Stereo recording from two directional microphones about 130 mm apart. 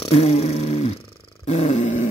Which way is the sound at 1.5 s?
60° left (ahead or behind).